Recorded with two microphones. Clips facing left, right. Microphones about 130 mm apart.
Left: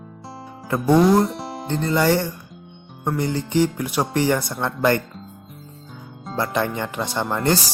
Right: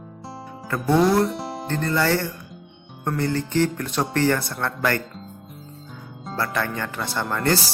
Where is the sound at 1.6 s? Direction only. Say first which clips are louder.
Left 3 dB; 15° left (ahead or behind).